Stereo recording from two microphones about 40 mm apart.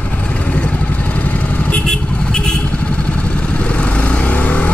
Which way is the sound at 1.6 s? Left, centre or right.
Left.